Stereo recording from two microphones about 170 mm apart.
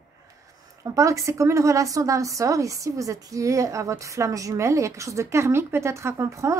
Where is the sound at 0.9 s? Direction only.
20° right (ahead or behind).